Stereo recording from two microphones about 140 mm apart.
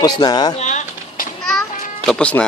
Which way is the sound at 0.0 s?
30° left (ahead or behind).